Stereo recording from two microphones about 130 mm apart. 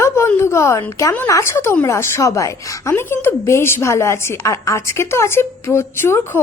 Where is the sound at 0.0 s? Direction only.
20° left (ahead or behind).